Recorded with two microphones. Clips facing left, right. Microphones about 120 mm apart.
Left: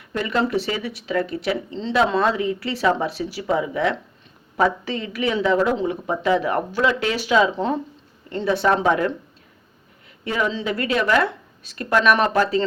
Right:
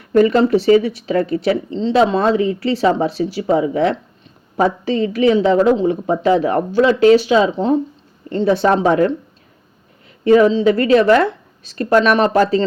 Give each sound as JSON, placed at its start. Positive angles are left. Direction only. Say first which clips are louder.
{"t": 0.3, "sound": "a woman's voice", "louder": "right 10 dB", "side_deg": -30}
{"t": 10.2, "sound": "speech", "louder": "right 13 dB", "side_deg": -40}